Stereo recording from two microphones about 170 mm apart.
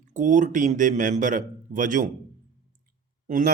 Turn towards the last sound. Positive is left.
turn(degrees=-50)  # may be behind; listen again after turning